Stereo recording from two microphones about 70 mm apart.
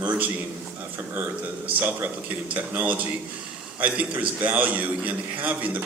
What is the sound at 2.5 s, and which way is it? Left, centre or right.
A man's voice, right.